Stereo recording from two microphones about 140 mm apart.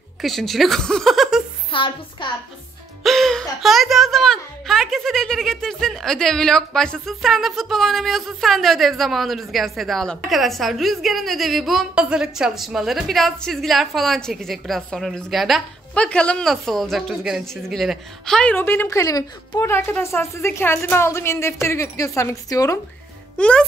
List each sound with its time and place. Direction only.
0.2 s a woman's voice: centre (ahead or behind)
1.7 s a woman's voice: 40° left (ahead or behind)
3.0 s a woman's voice: centre (ahead or behind); by 22.8 s 25° left (ahead or behind)
23.3 s speech: 5° left (ahead or behind)